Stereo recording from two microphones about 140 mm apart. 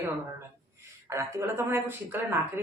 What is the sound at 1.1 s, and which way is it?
Speech, 20° right (ahead or behind).